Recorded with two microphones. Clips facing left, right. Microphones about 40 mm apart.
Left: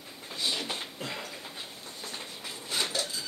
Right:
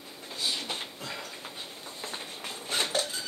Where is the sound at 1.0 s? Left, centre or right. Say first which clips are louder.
Left 1 dB; left.